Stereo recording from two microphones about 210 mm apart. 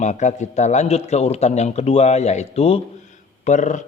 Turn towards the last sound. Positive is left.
turn(degrees=35)  # may be behind; listen again after turning